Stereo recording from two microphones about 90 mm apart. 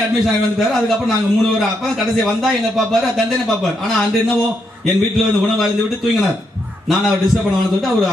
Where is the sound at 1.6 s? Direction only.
Centre (ahead or behind).